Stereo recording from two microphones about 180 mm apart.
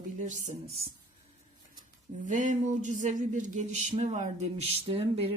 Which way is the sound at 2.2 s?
45° right (ahead or behind).